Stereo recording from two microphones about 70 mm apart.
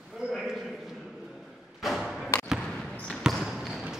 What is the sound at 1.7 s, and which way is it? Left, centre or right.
Thump, centre.